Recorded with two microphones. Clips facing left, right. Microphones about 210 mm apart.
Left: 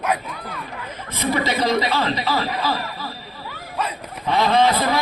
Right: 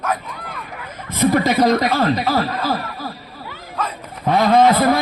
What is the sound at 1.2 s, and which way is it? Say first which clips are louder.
Speech: right 6 dB; 50° right (ahead or behind).